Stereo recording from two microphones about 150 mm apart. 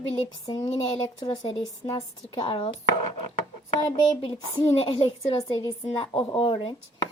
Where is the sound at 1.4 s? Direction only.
40° left (ahead or behind).